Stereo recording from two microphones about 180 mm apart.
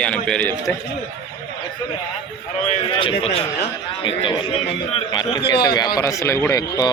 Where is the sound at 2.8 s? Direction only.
30° left (ahead or behind).